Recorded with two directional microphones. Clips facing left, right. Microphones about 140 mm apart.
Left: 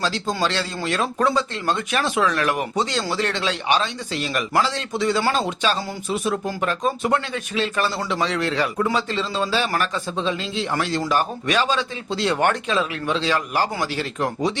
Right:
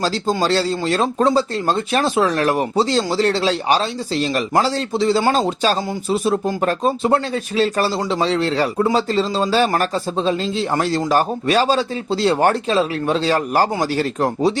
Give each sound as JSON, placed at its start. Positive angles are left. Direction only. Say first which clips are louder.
{"t": 0.0, "sound": "speech", "louder": "right 4 dB", "side_deg": -35}